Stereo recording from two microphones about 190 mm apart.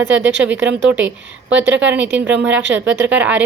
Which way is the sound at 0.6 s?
5° right (ahead or behind).